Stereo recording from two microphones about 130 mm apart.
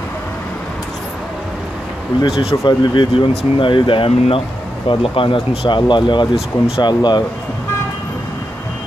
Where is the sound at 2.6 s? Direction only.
40° left (ahead or behind).